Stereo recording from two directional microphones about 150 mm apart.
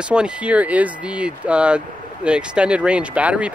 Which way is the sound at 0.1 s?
5° right (ahead or behind).